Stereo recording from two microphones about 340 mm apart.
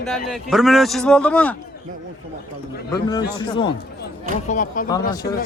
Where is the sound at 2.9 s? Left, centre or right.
Centre.